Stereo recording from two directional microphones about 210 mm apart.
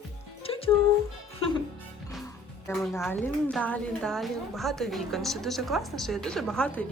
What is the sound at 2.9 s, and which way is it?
A woman's voice, 10° left (ahead or behind).